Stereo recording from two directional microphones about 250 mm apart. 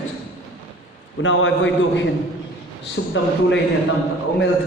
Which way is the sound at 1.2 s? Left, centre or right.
Left.